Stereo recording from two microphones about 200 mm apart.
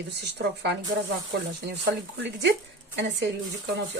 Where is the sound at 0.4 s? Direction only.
55° right (ahead or behind).